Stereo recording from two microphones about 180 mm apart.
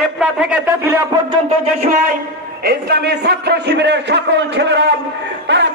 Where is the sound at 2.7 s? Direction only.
60° right (ahead or behind).